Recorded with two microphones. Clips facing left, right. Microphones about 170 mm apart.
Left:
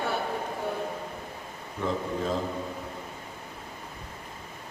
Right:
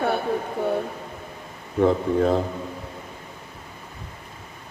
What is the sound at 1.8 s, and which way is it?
Speech, 60° right (ahead or behind).